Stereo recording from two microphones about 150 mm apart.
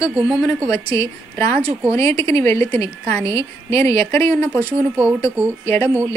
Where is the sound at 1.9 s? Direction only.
20° left (ahead or behind).